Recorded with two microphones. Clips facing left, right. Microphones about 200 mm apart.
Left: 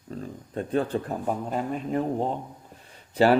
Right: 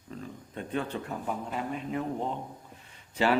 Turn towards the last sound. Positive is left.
turn(degrees=40)  # may be behind; listen again after turning